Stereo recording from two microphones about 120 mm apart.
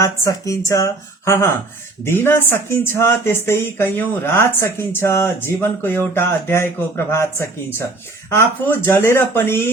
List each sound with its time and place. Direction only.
0.0 s speech: 25° left (ahead or behind)